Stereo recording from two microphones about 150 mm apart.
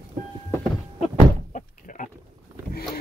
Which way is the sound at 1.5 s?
65° left (ahead or behind).